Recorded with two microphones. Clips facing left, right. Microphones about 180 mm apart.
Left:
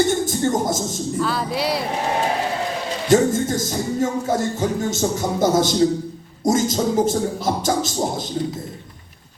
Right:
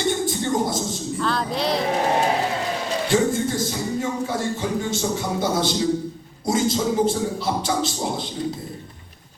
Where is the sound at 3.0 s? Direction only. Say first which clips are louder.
Left 5 dB; 40° left (ahead or behind).